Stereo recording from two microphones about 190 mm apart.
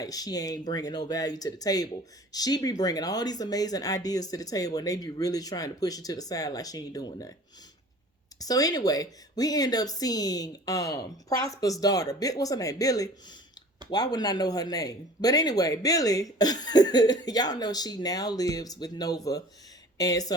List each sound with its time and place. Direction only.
0.0 s speech: 20° left (ahead or behind)
8.4 s speech: 20° left (ahead or behind)